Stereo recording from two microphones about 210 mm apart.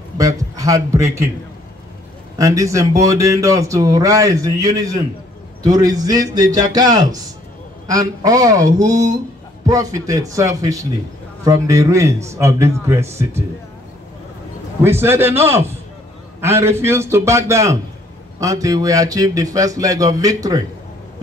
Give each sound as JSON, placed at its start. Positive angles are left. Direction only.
{"t": 0.2, "sound": "a man's voice", "side_deg": -15}
{"t": 2.3, "sound": "speech", "side_deg": -15}
{"t": 14.8, "sound": "speech", "side_deg": -10}